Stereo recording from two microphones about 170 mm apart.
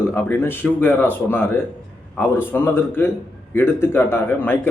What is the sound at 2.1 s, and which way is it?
A man's voice, 10° left (ahead or behind).